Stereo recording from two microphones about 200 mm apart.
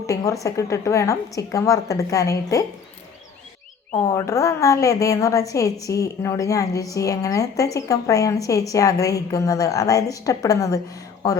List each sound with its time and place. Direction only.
0.4 s a woman's voice: 15° left (ahead or behind)
3.9 s a woman's voice: 15° left (ahead or behind)